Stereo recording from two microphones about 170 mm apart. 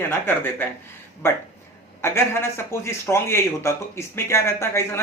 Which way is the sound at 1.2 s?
15° left (ahead or behind).